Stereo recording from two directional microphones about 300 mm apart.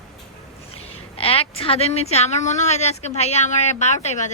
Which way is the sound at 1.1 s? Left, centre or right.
Centre.